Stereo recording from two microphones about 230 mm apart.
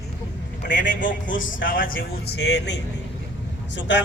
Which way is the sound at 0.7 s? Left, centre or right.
Left.